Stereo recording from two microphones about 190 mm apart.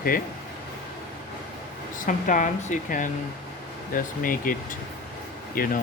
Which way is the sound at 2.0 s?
45° left (ahead or behind).